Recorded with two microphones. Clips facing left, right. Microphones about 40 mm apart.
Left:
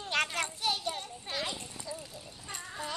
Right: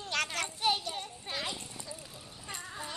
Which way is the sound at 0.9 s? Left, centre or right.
Centre.